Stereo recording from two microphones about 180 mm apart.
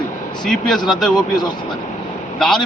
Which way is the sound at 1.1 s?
25° left (ahead or behind).